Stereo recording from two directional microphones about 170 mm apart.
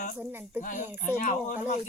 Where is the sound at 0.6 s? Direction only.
50° left (ahead or behind).